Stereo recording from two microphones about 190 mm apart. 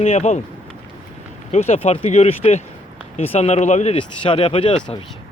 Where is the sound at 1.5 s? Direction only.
35° left (ahead or behind).